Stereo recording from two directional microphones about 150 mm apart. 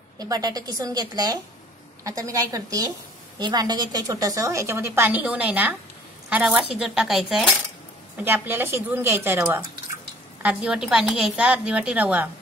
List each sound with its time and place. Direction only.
0.2 s a woman's voice: 25° right (ahead or behind); by 7.5 s centre (ahead or behind)
8.2 s a woman's voice: 15° right (ahead or behind)